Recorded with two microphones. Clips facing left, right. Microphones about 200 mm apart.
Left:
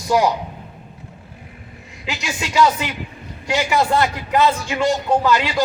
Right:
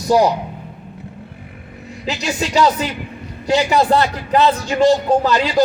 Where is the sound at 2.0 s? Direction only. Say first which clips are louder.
Right 5 dB; 35° right (ahead or behind).